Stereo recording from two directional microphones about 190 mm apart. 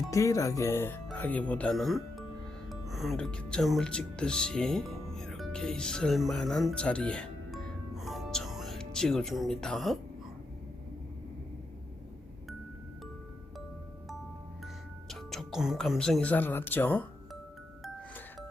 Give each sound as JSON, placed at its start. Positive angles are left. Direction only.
{"t": 0.1, "sound": "speech", "side_deg": 15}
{"t": 15.1, "sound": "speech", "side_deg": 0}